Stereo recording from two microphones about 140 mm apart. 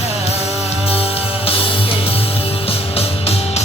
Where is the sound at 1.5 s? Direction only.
40° left (ahead or behind).